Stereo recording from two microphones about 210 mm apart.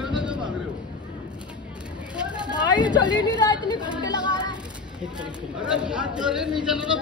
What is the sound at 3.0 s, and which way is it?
Speech, 20° left (ahead or behind).